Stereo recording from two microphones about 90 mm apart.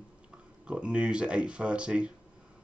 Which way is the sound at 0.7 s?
10° right (ahead or behind).